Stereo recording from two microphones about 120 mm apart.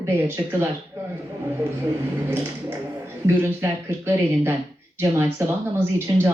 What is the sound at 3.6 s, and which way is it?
Speech, 20° right (ahead or behind).